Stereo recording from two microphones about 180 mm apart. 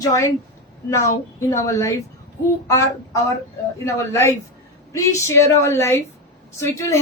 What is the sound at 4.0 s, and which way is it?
Speech, 15° left (ahead or behind).